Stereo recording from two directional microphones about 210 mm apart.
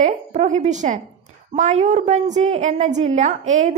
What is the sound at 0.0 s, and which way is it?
A woman's voice, 30° right (ahead or behind).